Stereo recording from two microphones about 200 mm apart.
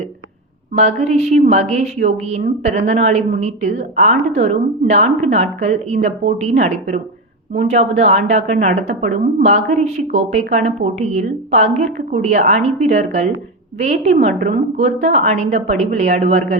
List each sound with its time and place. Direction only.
0.7 s a woman's voice: 40° right (ahead or behind)